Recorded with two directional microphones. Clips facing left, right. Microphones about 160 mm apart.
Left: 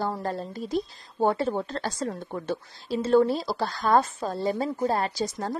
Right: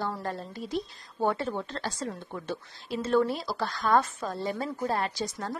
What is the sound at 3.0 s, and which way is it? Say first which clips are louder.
Speech: left 5 dB; 30° left (ahead or behind).